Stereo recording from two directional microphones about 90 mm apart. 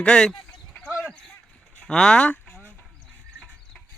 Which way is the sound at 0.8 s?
Centre (ahead or behind).